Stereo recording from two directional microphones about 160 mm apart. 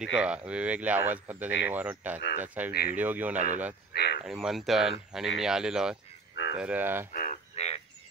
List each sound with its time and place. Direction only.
0.0 s speech: 5° right (ahead or behind)
2.7 s speech: 75° left (ahead or behind)
3.0 s speech: 10° right (ahead or behind)
3.3 s speech: 50° right (ahead or behind)
3.9 s speech: 90° left
4.2 s speech: 5° right (ahead or behind)
7.2 s a sound: 50° left (ahead or behind)